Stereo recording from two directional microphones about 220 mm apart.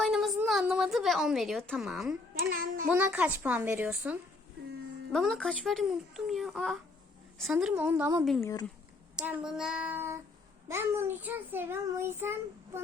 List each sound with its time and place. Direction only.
0.0 s a woman's voice: centre (ahead or behind)
8.4 s speech: 15° left (ahead or behind)
9.1 s a child's voice: 5° right (ahead or behind)